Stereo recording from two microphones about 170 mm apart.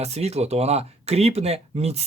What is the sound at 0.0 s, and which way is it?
Speech, 40° right (ahead or behind).